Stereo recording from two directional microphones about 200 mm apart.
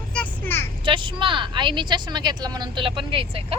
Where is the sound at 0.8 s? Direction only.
25° right (ahead or behind).